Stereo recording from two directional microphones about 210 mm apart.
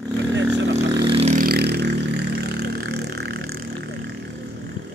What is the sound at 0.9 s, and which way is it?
Vehicle, 25° right (ahead or behind).